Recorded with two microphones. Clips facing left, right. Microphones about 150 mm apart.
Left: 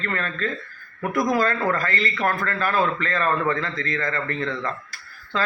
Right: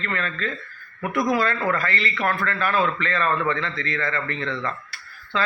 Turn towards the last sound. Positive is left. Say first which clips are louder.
# even
turn(degrees=40)  # may be behind; listen again after turning